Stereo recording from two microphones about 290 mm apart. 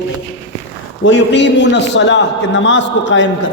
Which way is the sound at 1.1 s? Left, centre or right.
Left.